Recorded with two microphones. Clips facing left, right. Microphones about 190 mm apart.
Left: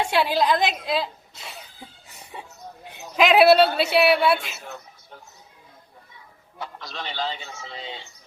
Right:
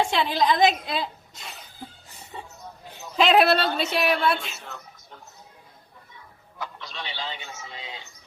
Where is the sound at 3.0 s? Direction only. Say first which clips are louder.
Left 2 dB; 10° left (ahead or behind).